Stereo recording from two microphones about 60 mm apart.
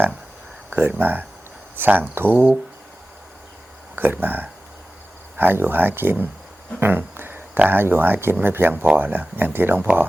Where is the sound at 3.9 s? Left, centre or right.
Right.